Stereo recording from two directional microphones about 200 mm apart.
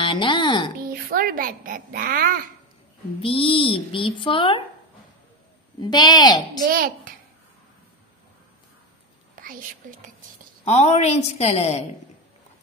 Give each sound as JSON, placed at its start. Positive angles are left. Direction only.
{"t": 0.0, "sound": "music", "side_deg": 25}
{"t": 0.7, "sound": "a child's voice", "side_deg": -45}
{"t": 3.2, "sound": "speech", "side_deg": 25}
{"t": 5.8, "sound": "speech", "side_deg": 20}
{"t": 6.6, "sound": "a child's voice", "side_deg": -45}
{"t": 9.3, "sound": "speech", "side_deg": -45}
{"t": 10.6, "sound": "a woman's voice", "side_deg": 35}